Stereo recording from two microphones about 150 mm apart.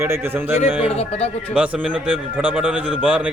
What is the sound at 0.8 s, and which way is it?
Speech, 40° left (ahead or behind).